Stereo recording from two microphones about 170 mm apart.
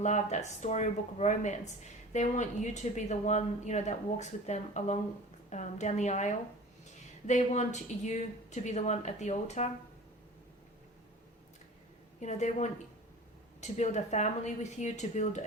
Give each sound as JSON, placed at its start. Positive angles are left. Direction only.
{"t": 0.0, "sound": "speech", "side_deg": 45}
{"t": 12.2, "sound": "speech", "side_deg": 45}